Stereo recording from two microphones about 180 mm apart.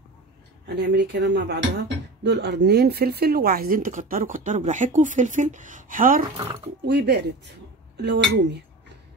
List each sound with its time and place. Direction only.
0.7 s speech: 70° right (ahead or behind); by 6.2 s 50° right (ahead or behind)
6.3 s speech: 30° right (ahead or behind)
6.9 s speech: 70° right (ahead or behind)